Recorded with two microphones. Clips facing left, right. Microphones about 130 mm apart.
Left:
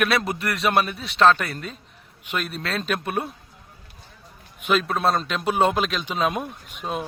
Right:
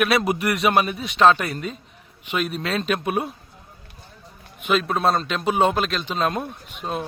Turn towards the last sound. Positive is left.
turn(degrees=0)  # may be behind; listen again after turning